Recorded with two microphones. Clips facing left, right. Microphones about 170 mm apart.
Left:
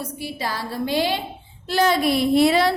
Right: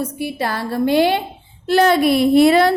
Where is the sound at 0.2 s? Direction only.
60° right (ahead or behind).